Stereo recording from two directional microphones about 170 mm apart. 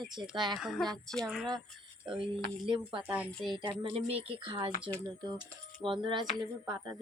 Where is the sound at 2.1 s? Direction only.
30° right (ahead or behind).